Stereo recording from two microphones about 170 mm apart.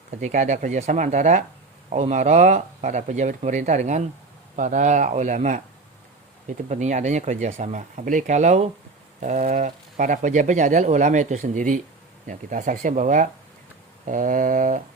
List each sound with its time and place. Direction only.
0.2 s speech: 45° right (ahead or behind)
6.7 s speech: 45° right (ahead or behind)